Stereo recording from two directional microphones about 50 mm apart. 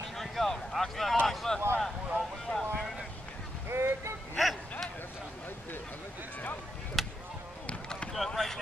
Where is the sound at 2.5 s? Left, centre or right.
Left.